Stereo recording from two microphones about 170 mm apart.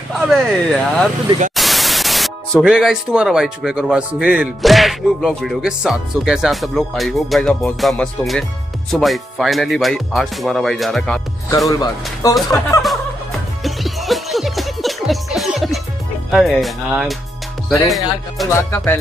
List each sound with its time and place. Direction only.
0.3 s speech: centre (ahead or behind)
11.7 s speech: 20° left (ahead or behind)
13.7 s music: centre (ahead or behind)
16.3 s speech: centre (ahead or behind)